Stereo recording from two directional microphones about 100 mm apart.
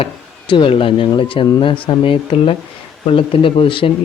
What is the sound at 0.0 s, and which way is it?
Speech, 55° left (ahead or behind).